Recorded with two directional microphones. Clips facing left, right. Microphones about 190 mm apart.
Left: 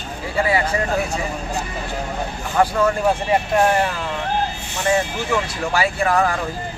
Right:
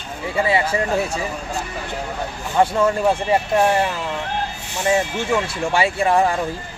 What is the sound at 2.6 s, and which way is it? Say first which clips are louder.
Speech: right 1 dB; 25° right (ahead or behind).